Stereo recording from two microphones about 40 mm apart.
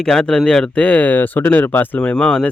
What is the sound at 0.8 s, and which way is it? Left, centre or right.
Speech, left.